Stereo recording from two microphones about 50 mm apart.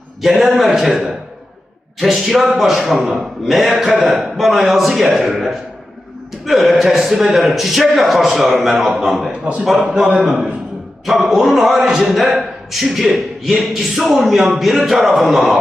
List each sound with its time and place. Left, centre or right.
0.2 s a man's voice: centre
9.4 s a man's voice: centre